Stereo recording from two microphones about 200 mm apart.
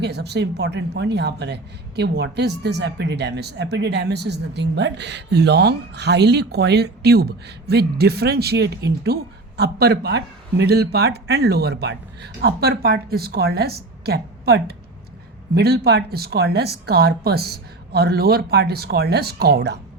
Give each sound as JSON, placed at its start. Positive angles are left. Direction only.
{"t": 0.0, "sound": "a man's voice", "side_deg": -55}